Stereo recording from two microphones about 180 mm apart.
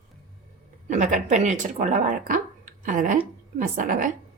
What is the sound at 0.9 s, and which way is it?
A woman's voice, 45° right (ahead or behind).